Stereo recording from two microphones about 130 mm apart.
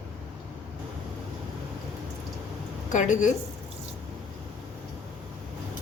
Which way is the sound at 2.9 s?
70° left (ahead or behind).